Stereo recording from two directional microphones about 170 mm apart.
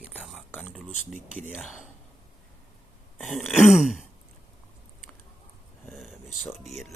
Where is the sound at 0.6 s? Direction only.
Centre (ahead or behind).